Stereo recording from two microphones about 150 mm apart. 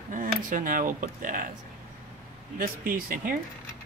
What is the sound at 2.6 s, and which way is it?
Speech, 70° right (ahead or behind).